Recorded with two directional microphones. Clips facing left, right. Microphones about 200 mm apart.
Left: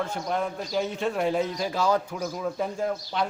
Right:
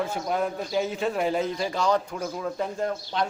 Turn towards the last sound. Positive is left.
turn(degrees=5)  # may be behind; listen again after turning